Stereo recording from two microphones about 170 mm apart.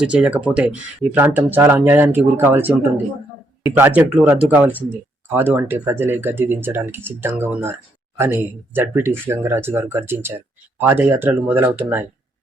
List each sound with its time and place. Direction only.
0.0 s speech: 10° right (ahead or behind)
3.8 s speech: 10° right (ahead or behind)